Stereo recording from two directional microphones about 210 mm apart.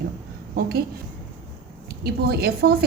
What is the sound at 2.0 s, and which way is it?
Speech, 50° right (ahead or behind).